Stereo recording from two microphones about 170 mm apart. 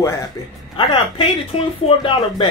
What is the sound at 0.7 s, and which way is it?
Speech, 30° left (ahead or behind).